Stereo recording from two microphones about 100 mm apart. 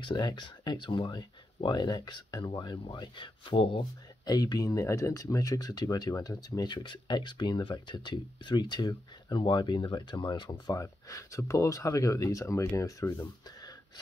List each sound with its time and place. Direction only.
0.0 s speech: 50° left (ahead or behind)
4.3 s speech: 40° left (ahead or behind)
10.7 s speech: 30° left (ahead or behind)